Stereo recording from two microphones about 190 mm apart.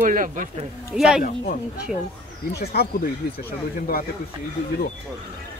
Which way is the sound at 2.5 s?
55° left (ahead or behind).